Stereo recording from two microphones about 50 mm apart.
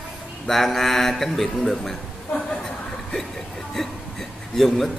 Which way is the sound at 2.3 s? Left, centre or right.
Centre.